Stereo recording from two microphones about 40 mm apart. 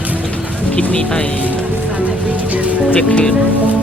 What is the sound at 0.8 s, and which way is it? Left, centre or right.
Speech, left.